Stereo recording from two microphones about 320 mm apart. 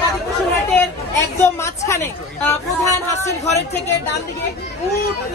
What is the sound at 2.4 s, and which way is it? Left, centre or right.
Speech, centre.